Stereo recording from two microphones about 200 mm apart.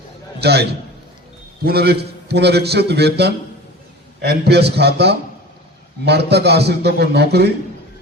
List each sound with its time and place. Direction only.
0.3 s a man's voice: 55° right (ahead or behind)